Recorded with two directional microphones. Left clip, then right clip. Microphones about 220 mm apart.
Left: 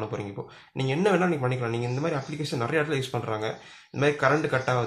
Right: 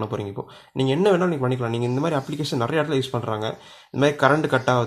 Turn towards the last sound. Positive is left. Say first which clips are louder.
# right 5 dB
turn(degrees=-40)  # may be behind; listen again after turning